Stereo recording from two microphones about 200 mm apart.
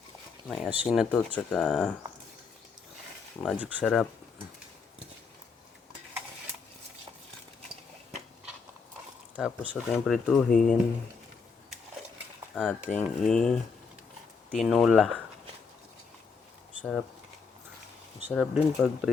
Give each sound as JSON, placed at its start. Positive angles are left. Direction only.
{"t": 0.4, "sound": "speech", "side_deg": 0}
{"t": 3.4, "sound": "speech", "side_deg": -5}
{"t": 9.3, "sound": "speech", "side_deg": -5}
{"t": 10.5, "sound": "speech", "side_deg": 40}
{"t": 12.5, "sound": "speech", "side_deg": 5}
{"t": 18.3, "sound": "speech", "side_deg": 0}